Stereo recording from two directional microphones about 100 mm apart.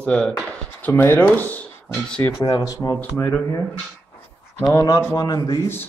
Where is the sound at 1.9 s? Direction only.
10° left (ahead or behind).